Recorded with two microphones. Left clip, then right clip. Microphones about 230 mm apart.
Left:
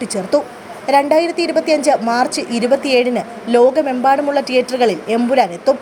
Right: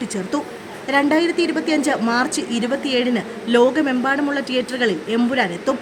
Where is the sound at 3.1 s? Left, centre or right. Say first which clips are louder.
Left 3 dB; centre.